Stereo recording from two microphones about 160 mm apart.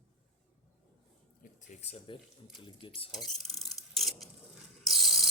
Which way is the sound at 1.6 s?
45° left (ahead or behind).